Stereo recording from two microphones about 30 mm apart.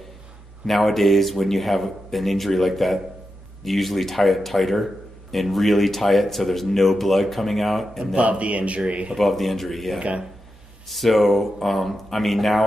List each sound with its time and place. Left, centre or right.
0.7 s speech: centre
8.2 s a man's voice: right
9.1 s speech: centre